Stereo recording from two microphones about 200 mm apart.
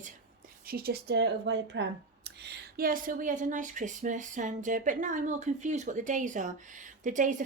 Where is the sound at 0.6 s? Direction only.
50° right (ahead or behind).